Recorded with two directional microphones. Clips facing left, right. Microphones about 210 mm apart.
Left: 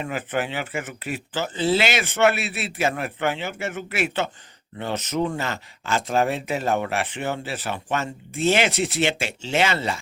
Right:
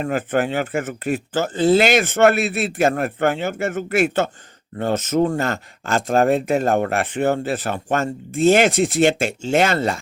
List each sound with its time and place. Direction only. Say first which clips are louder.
0.0 s speech: right 6 dB; 45° right (ahead or behind)